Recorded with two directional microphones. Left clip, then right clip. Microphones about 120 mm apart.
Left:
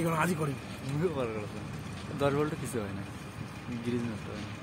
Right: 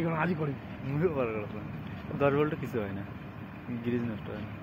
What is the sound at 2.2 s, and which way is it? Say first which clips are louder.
Speech: right 3 dB; 5° right (ahead or behind).